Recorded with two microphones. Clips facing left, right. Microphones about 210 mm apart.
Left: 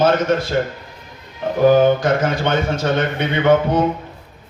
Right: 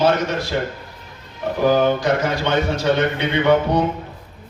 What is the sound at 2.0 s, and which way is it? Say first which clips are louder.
A man's voice: left 2 dB; 50° left (ahead or behind).